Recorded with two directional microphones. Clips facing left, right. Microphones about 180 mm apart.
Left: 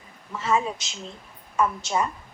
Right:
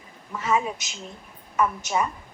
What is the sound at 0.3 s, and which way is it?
A woman's voice, 10° right (ahead or behind).